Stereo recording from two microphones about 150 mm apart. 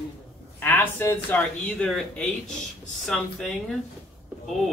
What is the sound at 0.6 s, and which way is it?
Speech, 15° left (ahead or behind).